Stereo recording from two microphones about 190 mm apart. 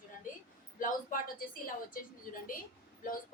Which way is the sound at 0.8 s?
45° left (ahead or behind).